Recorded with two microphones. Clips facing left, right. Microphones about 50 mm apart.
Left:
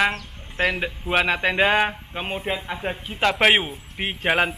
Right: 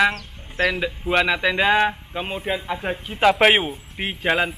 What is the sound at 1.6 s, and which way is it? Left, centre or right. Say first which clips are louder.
Speech: right 1 dB; centre.